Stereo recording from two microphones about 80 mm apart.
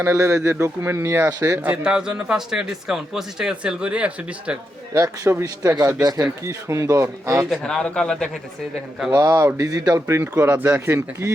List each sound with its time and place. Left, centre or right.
0.0 s speech: right
1.6 s a man's voice: centre
4.9 s speech: right
6.0 s speech: right
6.4 s speech: right
7.6 s speech: centre
9.0 s speech: right
10.1 s speech: right